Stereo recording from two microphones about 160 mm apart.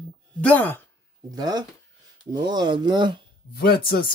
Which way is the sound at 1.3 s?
25° right (ahead or behind).